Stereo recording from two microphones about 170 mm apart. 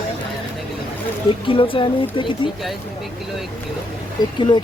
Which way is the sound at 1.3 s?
30° left (ahead or behind).